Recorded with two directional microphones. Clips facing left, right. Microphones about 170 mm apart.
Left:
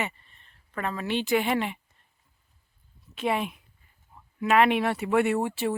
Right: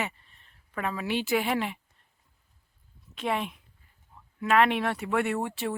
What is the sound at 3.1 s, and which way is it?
Speech, 5° left (ahead or behind).